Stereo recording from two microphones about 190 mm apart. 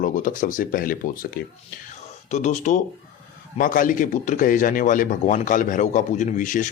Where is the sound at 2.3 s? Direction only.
35° left (ahead or behind).